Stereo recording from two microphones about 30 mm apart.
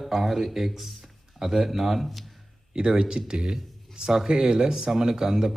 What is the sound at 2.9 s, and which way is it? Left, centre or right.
A man's voice, right.